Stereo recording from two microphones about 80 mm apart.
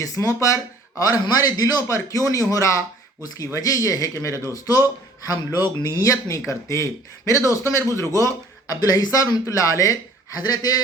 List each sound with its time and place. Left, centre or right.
0.0 s a man's voice: left
8.7 s a man's voice: left
10.3 s a man's voice: left